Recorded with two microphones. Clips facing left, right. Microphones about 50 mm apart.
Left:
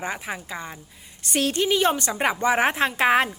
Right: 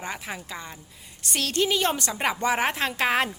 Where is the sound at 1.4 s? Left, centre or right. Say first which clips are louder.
Left 3 dB; centre.